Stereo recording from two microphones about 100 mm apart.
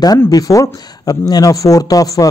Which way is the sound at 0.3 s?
35° left (ahead or behind).